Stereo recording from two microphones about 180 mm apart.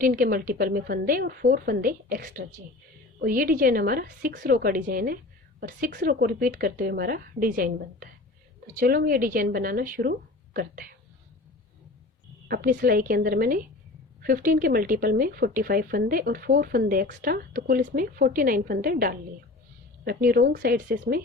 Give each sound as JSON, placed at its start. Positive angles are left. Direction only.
{"t": 0.0, "sound": "a woman's voice", "side_deg": -50}
{"t": 12.5, "sound": "a woman's voice", "side_deg": -55}